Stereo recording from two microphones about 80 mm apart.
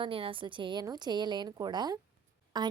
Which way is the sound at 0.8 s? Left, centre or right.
Right.